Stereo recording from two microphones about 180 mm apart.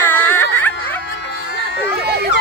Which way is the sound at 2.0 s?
65° right (ahead or behind).